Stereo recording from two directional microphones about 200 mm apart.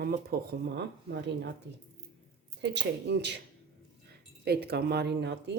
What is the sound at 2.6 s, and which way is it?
Speech, 60° right (ahead or behind).